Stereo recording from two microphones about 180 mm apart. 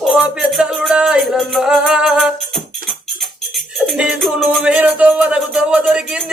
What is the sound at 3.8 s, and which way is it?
Music, centre (ahead or behind).